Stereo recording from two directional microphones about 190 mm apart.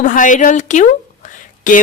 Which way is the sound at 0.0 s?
45° left (ahead or behind).